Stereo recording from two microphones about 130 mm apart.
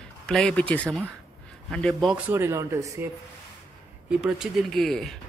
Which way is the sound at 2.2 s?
20° right (ahead or behind).